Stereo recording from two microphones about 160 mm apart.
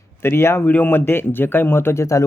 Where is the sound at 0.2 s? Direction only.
15° left (ahead or behind).